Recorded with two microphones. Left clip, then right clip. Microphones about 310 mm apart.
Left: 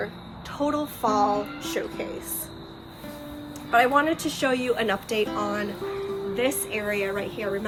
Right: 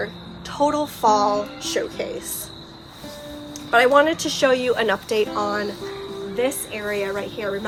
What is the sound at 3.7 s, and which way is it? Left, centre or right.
A woman's voice, right.